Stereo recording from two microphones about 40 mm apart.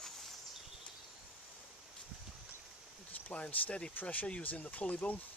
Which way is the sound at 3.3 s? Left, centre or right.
Left.